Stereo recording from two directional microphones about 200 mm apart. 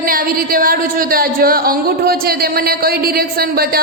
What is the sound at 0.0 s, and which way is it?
A woman's voice, 45° right (ahead or behind).